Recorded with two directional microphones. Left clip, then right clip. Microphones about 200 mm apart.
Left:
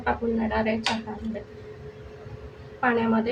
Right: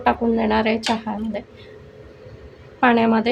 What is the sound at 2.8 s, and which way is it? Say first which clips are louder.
Speech: right 7 dB; 55° right (ahead or behind).